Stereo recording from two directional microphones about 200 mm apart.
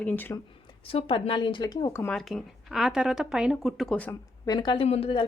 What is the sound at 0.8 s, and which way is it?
A woman's voice, 30° left (ahead or behind).